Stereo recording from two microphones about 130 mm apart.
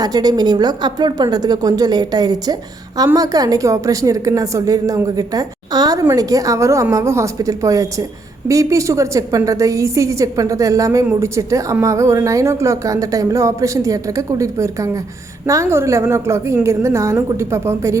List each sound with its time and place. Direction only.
0.0 s a woman's voice: 30° right (ahead or behind)